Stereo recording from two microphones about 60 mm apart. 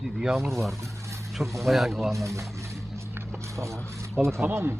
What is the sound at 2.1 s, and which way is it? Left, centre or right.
Speech, right.